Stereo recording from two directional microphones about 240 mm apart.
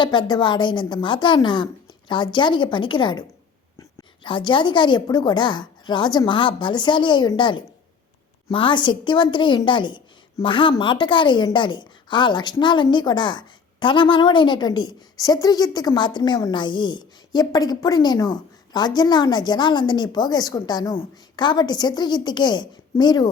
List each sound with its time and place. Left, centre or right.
0.0 s a woman's voice: centre